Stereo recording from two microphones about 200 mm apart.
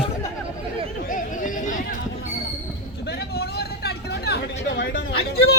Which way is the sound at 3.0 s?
55° left (ahead or behind).